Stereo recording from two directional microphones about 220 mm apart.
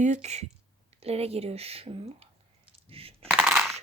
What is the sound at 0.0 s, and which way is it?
Speech, 30° right (ahead or behind).